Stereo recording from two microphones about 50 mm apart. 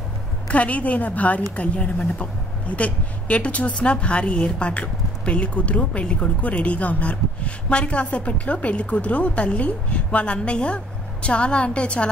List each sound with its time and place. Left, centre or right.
0.5 s a woman's voice: left